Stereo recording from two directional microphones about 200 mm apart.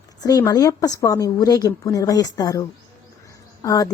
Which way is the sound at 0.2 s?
20° left (ahead or behind).